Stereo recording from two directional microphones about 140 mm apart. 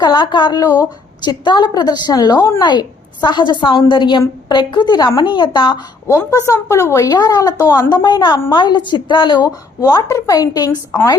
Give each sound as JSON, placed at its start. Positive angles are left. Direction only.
{"t": 0.0, "sound": "a woman's voice", "side_deg": 30}
{"t": 6.1, "sound": "a woman's voice", "side_deg": 20}